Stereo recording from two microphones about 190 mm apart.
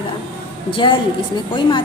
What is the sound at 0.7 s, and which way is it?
Speech, 25° left (ahead or behind).